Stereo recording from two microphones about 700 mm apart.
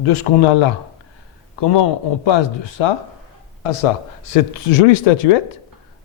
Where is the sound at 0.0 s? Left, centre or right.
Left.